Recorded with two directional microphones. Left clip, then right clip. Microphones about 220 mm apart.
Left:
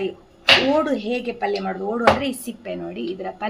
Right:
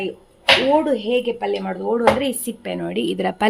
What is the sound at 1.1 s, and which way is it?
Speech, 30° right (ahead or behind).